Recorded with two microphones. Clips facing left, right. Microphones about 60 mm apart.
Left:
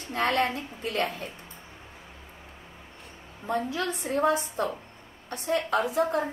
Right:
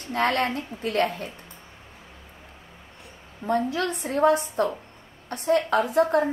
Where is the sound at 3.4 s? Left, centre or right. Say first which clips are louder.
Right 4 dB; right.